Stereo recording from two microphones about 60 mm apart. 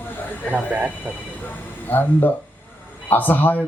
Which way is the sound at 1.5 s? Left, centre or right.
Left.